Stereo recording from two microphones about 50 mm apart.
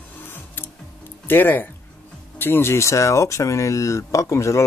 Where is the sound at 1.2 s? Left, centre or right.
Left.